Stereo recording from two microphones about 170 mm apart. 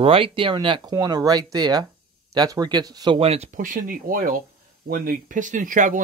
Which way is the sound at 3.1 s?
35° right (ahead or behind).